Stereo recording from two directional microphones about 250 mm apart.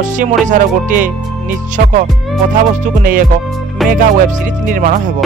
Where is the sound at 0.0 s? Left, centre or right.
Right.